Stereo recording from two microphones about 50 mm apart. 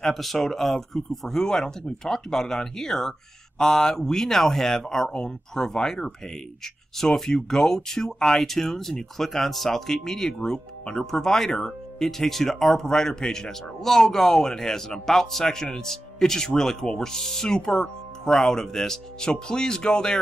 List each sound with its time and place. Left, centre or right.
0.0 s speech: centre